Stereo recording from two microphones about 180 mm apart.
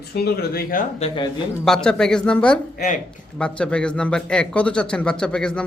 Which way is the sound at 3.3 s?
5° left (ahead or behind).